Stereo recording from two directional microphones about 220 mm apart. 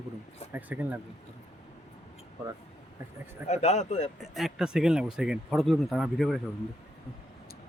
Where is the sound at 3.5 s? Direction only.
30° left (ahead or behind).